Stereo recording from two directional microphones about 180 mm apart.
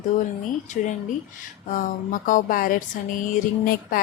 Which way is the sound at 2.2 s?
50° left (ahead or behind).